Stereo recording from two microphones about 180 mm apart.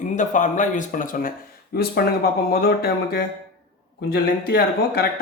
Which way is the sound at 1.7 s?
60° left (ahead or behind).